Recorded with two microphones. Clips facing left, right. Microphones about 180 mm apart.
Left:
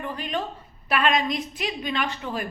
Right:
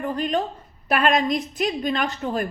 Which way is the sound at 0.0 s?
45° right (ahead or behind).